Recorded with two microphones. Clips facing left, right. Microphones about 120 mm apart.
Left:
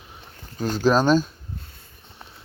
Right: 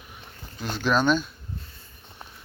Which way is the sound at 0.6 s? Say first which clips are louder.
Left 4 dB; 40° left (ahead or behind).